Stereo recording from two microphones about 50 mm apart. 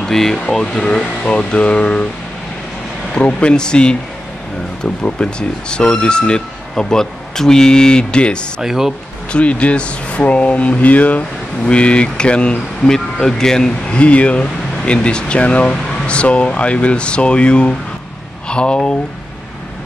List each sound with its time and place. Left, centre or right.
0.0 s speech: centre
3.2 s speech: left
8.5 s speech: centre
9.3 s speech: left